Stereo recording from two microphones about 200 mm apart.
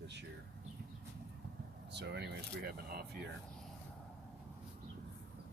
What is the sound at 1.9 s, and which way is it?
Speech, 55° right (ahead or behind).